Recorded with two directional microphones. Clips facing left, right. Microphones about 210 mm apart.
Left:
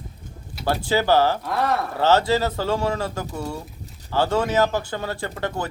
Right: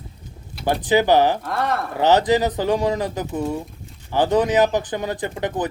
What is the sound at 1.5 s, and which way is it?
Speech, centre (ahead or behind).